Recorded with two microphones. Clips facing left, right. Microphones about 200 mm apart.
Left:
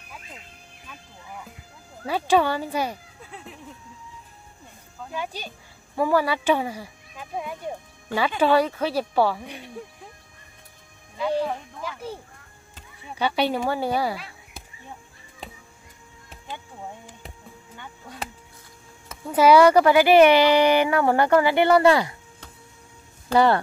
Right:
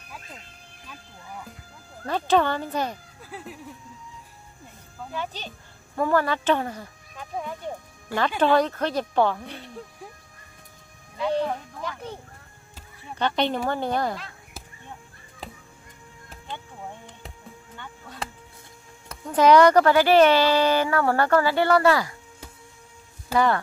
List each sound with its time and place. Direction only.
2.0 s speech: 10° left (ahead or behind)
3.3 s a sound: 5° right (ahead or behind)
5.1 s speech: 10° left (ahead or behind)
11.1 s speech: 5° left (ahead or behind)
16.3 s a sound: 10° left (ahead or behind)
17.7 s music: 15° left (ahead or behind)
19.0 s speech: 5° left (ahead or behind)
23.3 s speech: 30° left (ahead or behind)